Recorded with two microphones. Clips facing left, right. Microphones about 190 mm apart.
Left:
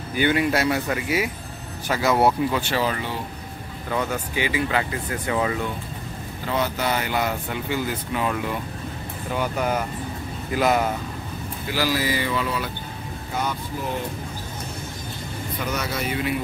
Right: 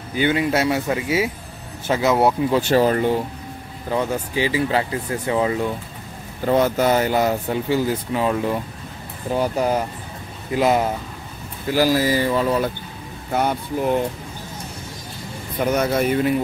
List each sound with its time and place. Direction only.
0.1 s speech: 20° right (ahead or behind)
2.5 s speech: 40° right (ahead or behind)
3.9 s speech: 30° right (ahead or behind)
6.4 s speech: 45° right (ahead or behind); by 10.9 s 25° right (ahead or behind)
11.7 s speech: 45° right (ahead or behind)
13.3 s speech: 55° right (ahead or behind)
15.6 s speech: 50° right (ahead or behind)